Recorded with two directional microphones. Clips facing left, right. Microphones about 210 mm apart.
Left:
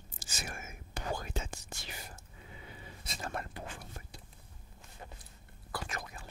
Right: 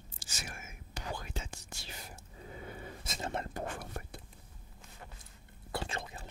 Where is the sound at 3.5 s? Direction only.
50° right (ahead or behind).